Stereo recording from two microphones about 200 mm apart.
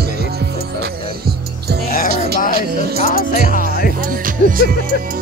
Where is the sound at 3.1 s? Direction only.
45° left (ahead or behind).